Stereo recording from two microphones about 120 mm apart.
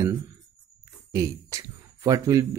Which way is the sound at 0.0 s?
25° right (ahead or behind).